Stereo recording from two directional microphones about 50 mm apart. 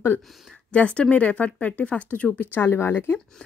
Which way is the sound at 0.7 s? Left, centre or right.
Left.